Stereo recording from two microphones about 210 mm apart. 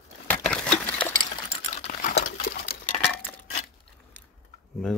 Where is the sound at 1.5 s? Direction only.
30° left (ahead or behind).